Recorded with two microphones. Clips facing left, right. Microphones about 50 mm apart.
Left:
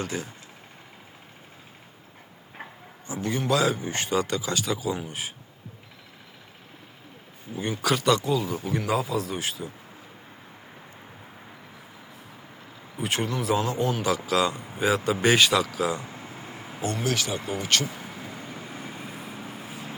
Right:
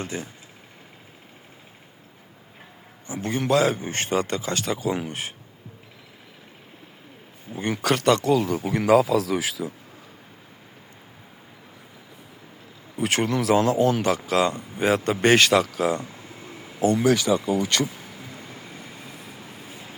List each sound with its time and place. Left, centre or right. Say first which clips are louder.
0.0 s speech: even; right
3.1 s a man's voice: right 3 dB; right
7.5 s a man's voice: right 2 dB; right
8.2 s speech: right 5 dB; right
13.0 s speech: right 5 dB; right
14.0 s a man's voice: right 2 dB; right
16.0 s a sound: left 1 dB; left
17.4 s speech: right 4 dB; left
18.2 s vehicle: left 2 dB; left